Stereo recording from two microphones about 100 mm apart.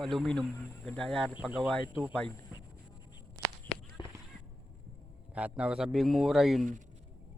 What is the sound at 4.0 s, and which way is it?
Whip, 50° left (ahead or behind).